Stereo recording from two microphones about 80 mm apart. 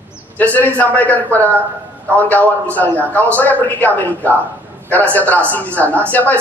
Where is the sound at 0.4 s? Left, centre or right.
Left.